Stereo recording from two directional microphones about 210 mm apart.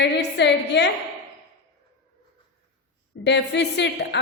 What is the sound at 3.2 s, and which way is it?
Speech, 55° left (ahead or behind).